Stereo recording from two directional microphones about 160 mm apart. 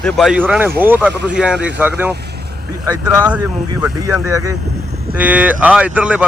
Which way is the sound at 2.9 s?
20° right (ahead or behind).